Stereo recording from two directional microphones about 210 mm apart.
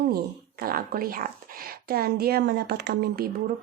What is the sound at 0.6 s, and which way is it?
A woman's voice, 45° right (ahead or behind).